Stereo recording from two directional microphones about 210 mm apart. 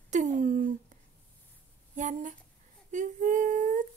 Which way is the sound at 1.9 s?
35° right (ahead or behind).